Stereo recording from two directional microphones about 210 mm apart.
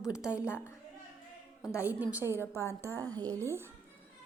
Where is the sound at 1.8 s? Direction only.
10° right (ahead or behind).